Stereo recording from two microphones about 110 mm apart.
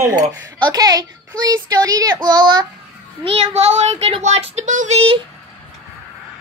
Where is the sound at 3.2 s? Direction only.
65° right (ahead or behind).